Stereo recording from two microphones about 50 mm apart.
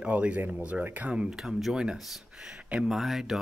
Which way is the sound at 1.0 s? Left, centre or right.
Right.